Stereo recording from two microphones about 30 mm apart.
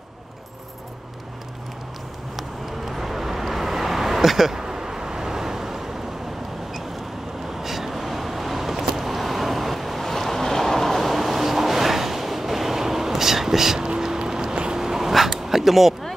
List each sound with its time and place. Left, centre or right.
2.3 s vehicle: centre
7.6 s vehicle: centre
13.2 s whispering: centre
13.8 s a sound: right
14.8 s vehicle: centre